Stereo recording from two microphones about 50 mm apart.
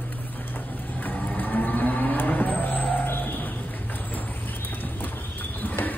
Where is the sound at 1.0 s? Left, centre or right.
Left.